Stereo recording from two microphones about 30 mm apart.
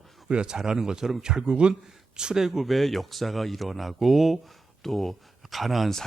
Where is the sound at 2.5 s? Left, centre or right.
Centre.